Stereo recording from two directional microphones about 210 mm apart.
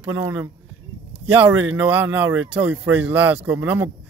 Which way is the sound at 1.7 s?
10° right (ahead or behind).